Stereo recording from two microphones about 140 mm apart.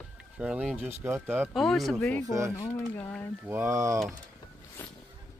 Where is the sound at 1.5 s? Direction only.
Centre (ahead or behind).